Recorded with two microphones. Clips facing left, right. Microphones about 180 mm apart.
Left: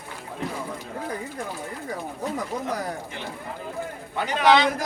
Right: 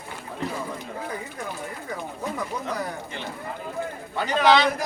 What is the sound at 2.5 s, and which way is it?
Speech, 45° left (ahead or behind).